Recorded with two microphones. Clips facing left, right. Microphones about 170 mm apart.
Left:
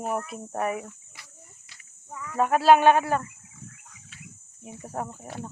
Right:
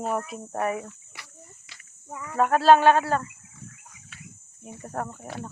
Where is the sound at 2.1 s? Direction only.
30° right (ahead or behind).